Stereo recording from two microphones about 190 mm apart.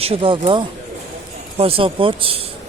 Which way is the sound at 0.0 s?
30° right (ahead or behind).